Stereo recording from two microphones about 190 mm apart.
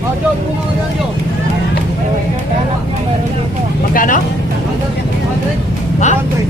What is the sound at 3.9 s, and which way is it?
Speech, 45° left (ahead or behind).